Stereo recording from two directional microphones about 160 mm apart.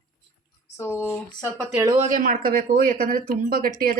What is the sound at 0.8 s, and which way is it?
Speech, 15° left (ahead or behind).